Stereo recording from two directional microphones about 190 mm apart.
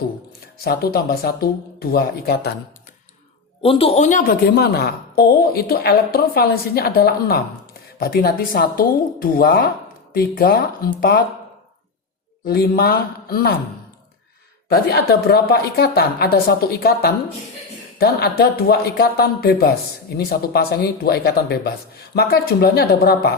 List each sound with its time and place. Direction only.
0.6 s speech: 55° left (ahead or behind)
3.6 s a woman's voice: 30° left (ahead or behind); by 10.9 s 50° left (ahead or behind)
12.5 s a woman's voice: 55° left (ahead or behind)
14.7 s speech: 55° left (ahead or behind)